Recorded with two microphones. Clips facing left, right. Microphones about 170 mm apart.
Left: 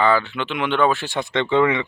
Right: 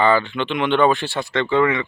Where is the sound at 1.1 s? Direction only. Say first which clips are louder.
Even; 20° left (ahead or behind).